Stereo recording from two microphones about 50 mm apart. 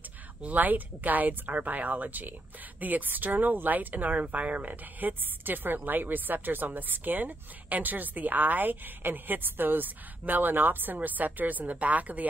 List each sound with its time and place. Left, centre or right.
0.4 s speech: right